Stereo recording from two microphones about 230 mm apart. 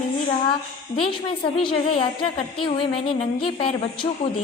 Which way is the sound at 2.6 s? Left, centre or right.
Left.